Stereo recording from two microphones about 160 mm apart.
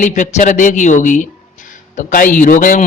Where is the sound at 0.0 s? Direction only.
50° left (ahead or behind).